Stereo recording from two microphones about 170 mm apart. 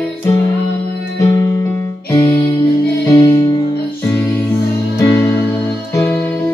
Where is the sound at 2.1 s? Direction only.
20° left (ahead or behind).